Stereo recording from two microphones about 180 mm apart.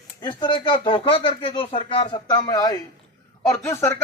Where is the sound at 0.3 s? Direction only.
25° left (ahead or behind).